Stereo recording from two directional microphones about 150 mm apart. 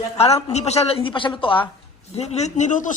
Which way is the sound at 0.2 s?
45° left (ahead or behind).